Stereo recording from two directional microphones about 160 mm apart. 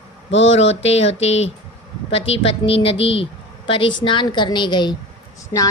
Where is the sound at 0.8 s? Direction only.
40° left (ahead or behind).